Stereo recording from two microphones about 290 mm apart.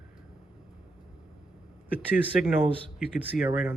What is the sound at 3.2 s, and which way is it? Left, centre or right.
Speech, centre.